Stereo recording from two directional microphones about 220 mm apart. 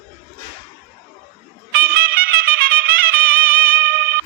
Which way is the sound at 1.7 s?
45° right (ahead or behind).